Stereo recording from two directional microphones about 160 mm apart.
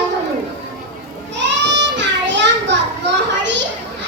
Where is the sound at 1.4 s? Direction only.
90° right.